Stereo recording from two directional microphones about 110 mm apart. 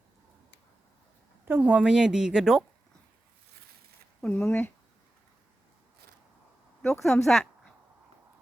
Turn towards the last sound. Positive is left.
turn(degrees=5)  # may be behind; listen again after turning